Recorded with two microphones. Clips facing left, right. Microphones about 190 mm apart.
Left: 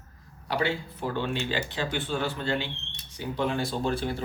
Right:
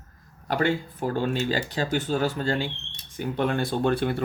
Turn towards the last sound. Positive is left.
turn(degrees=-60)  # may be behind; listen again after turning